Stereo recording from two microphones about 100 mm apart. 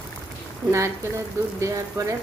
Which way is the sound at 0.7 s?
30° right (ahead or behind).